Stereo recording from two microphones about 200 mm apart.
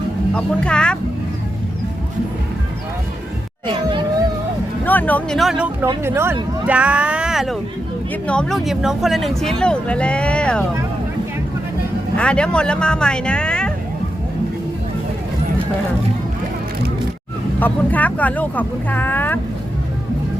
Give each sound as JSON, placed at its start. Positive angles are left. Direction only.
{"t": 0.3, "sound": "speech", "side_deg": 5}
{"t": 3.7, "sound": "speech", "side_deg": -25}
{"t": 4.9, "sound": "speech", "side_deg": 10}
{"t": 12.1, "sound": "speech", "side_deg": 5}
{"t": 17.6, "sound": "speech", "side_deg": 10}